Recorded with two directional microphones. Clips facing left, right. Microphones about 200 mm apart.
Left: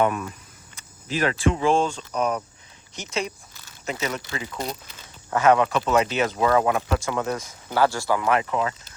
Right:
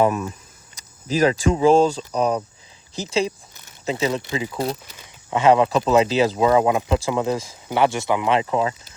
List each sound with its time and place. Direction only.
0.0 s speech: 25° right (ahead or behind)
1.0 s speech: 40° right (ahead or behind)
3.5 s speech: 20° right (ahead or behind)
6.4 s speech: 20° right (ahead or behind)